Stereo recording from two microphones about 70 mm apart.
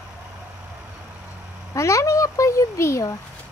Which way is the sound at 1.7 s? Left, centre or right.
Left.